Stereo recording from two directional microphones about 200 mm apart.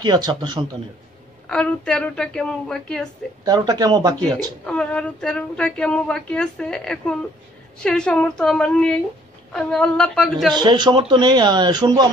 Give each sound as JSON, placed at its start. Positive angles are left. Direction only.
{"t": 0.0, "sound": "speech", "side_deg": -20}
{"t": 1.5, "sound": "a woman's voice", "side_deg": 5}
{"t": 3.4, "sound": "speech", "side_deg": -20}
{"t": 4.6, "sound": "a woman's voice", "side_deg": 5}
{"t": 10.5, "sound": "speech", "side_deg": -20}